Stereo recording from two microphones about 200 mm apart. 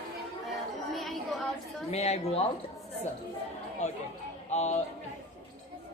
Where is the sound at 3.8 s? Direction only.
35° left (ahead or behind).